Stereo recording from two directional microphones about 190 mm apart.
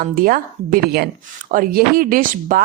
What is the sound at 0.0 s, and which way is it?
A woman's voice, 50° right (ahead or behind).